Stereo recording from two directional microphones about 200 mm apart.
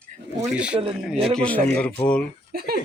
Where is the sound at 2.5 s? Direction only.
50° right (ahead or behind).